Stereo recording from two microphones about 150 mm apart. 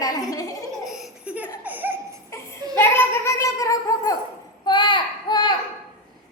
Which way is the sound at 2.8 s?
15° left (ahead or behind).